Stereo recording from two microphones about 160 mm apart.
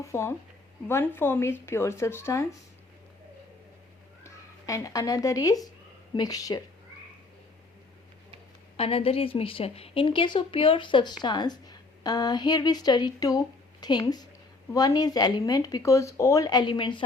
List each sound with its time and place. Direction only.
0.0 s a woman's voice: 15° left (ahead or behind)
4.2 s speech: 20° left (ahead or behind)
8.7 s a woman's voice: 35° left (ahead or behind)